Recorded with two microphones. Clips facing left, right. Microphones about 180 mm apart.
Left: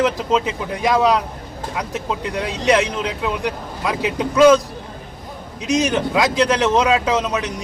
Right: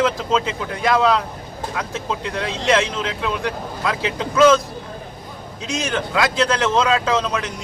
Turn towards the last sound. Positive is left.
turn(degrees=20)  # may be behind; listen again after turning